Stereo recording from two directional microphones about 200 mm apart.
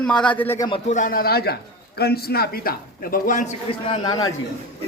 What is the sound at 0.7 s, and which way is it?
A man's voice, 35° left (ahead or behind).